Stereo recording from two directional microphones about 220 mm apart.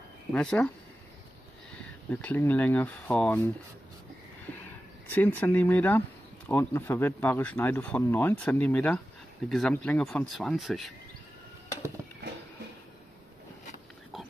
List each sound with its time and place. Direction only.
0.3 s speech: 5° left (ahead or behind)
2.0 s speech: 10° left (ahead or behind)
5.1 s speech: 10° left (ahead or behind)
14.1 s pig: centre (ahead or behind)